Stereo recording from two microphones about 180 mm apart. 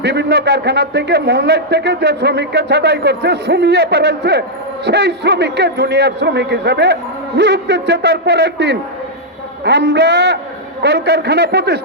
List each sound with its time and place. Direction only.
0.0 s a man's voice: 70° right (ahead or behind)
10.8 s a man's voice: 70° right (ahead or behind)